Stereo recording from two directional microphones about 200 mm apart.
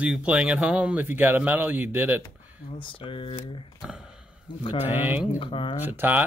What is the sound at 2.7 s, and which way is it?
Speech, 25° left (ahead or behind).